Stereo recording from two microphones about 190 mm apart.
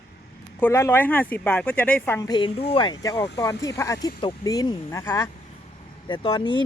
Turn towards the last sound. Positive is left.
turn(degrees=25)  # may be behind; listen again after turning